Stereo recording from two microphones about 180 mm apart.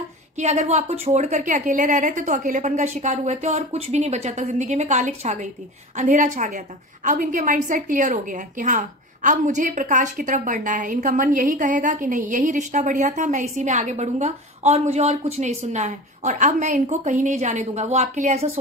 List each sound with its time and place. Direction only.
0.4 s a woman's voice: 40° right (ahead or behind)